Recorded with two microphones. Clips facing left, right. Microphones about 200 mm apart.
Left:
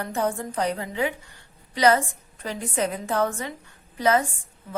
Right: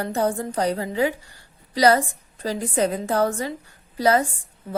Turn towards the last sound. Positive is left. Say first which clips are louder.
# right 2 dB
turn(degrees=-35)  # may be behind; listen again after turning